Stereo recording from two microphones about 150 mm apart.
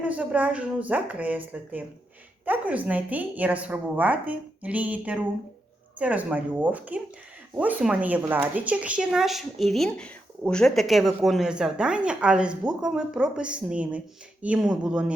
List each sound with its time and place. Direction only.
0.0 s a woman's voice: 10° right (ahead or behind)